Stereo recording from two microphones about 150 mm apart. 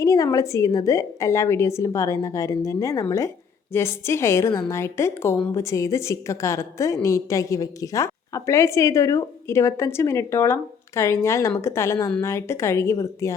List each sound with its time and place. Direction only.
0.0 s a woman's voice: 20° left (ahead or behind)